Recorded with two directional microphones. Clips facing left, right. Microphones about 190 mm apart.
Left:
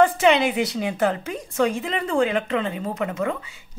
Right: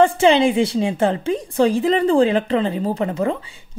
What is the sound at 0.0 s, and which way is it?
A woman's voice, 30° right (ahead or behind).